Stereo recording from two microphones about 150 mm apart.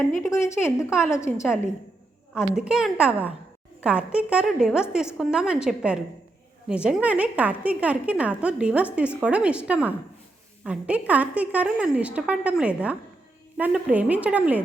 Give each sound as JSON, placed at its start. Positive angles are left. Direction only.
{"t": 0.3, "sound": "a woman's voice", "side_deg": 20}
{"t": 2.3, "sound": "a woman's voice", "side_deg": -5}